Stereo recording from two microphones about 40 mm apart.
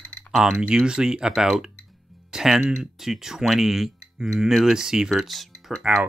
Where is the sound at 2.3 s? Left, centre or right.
Centre.